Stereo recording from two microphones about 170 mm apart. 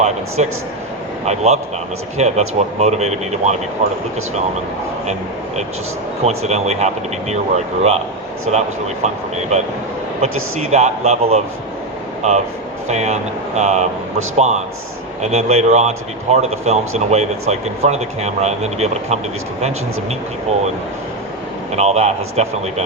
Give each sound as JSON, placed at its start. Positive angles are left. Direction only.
{"t": 0.4, "sound": "speech", "side_deg": -40}
{"t": 6.2, "sound": "speech", "side_deg": -40}
{"t": 10.2, "sound": "speech", "side_deg": -40}
{"t": 21.8, "sound": "speech", "side_deg": -40}